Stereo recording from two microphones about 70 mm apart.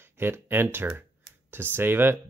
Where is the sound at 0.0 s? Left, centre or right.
Right.